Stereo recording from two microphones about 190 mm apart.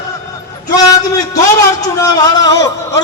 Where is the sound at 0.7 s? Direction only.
20° left (ahead or behind).